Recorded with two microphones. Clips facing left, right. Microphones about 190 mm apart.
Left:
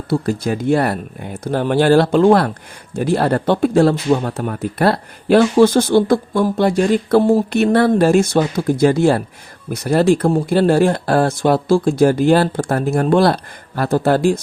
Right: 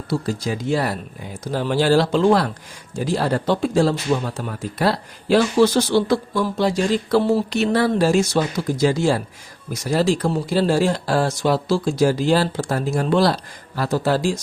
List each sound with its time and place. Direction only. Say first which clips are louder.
0.1 s speech: left 5 dB; 55° left (ahead or behind)